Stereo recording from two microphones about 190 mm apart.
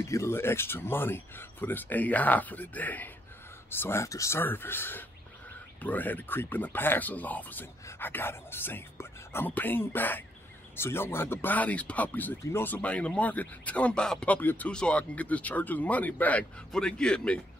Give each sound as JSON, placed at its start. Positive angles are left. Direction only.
{"t": 0.1, "sound": "speech", "side_deg": 15}